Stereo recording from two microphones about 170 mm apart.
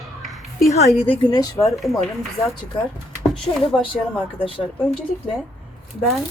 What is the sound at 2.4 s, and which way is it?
Speech, 20° left (ahead or behind).